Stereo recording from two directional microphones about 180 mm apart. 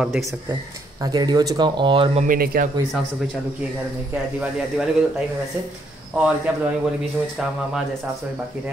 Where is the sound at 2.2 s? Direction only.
55° right (ahead or behind).